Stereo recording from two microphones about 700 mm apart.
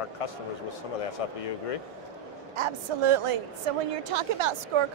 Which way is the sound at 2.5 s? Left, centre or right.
Right.